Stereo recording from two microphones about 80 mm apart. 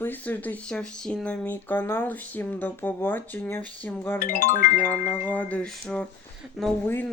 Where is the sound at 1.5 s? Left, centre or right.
Left.